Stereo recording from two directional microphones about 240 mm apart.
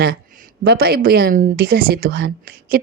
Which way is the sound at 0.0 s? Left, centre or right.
Right.